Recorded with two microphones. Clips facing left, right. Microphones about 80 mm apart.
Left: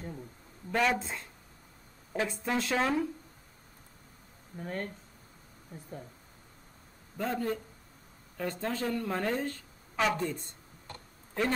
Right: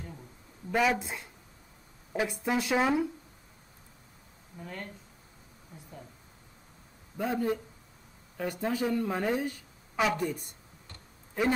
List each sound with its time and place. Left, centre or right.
0.7 s speech: centre
4.6 s speech: left
7.2 s speech: centre